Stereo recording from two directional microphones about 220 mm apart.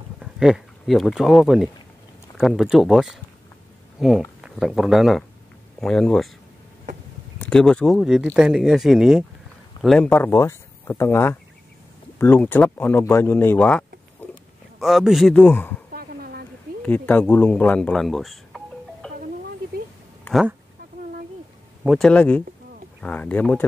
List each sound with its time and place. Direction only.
0.2 s speech: 5° right (ahead or behind)
7.3 s speech: 5° left (ahead or behind)
14.2 s pig: 5° left (ahead or behind)
14.8 s speech: centre (ahead or behind)
15.9 s a sound: 40° right (ahead or behind)
16.8 s speech: 5° left (ahead or behind)
20.3 s a sound: 10° left (ahead or behind)
21.8 s speech: centre (ahead or behind)